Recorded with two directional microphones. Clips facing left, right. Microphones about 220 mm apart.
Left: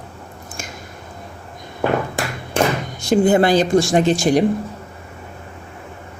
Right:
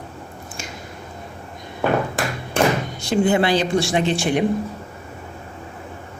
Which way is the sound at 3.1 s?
45° left (ahead or behind).